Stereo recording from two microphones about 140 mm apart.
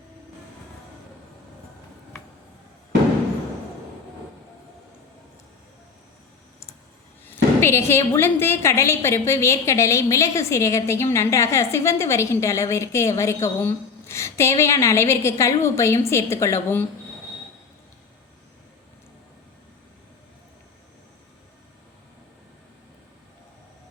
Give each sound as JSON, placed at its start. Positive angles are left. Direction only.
{"t": 7.6, "sound": "a woman's voice", "side_deg": 15}